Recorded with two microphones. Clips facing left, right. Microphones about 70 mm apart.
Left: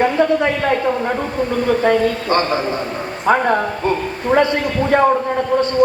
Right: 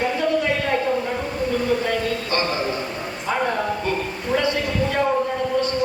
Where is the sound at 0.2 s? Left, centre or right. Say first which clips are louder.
Left 9 dB; left.